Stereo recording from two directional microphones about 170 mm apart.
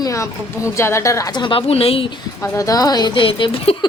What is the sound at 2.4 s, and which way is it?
A woman's voice, 20° left (ahead or behind).